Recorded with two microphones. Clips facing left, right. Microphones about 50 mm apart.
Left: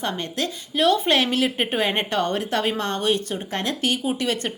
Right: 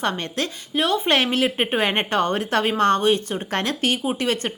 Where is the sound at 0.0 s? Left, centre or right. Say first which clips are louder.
Right 2 dB; right.